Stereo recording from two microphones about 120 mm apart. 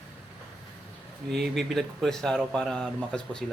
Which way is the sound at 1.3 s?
Centre (ahead or behind).